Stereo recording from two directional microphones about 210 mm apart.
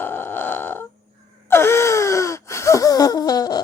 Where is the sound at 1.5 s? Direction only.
10° left (ahead or behind).